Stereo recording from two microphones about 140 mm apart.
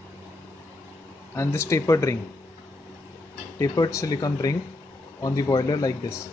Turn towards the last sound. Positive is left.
turn(degrees=25)  # may be behind; listen again after turning